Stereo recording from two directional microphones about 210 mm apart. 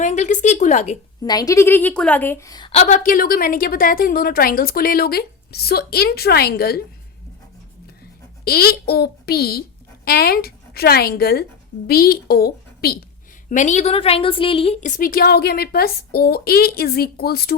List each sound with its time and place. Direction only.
0.0 s speech: 35° left (ahead or behind)
1.2 s a woman's voice: 15° left (ahead or behind); by 6.8 s 50° left (ahead or behind)
8.4 s a woman's voice: 45° left (ahead or behind)
13.5 s a woman's voice: 35° left (ahead or behind)